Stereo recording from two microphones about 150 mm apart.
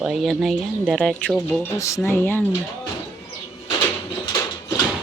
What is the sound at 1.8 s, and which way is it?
Speech, 20° left (ahead or behind).